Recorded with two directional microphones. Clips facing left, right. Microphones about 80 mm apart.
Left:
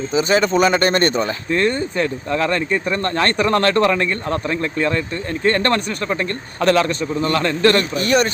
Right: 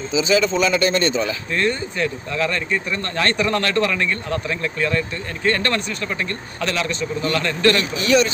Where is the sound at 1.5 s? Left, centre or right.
Left.